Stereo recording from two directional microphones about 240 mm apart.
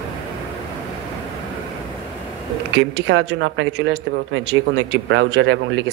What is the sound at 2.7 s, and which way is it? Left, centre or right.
Speech, right.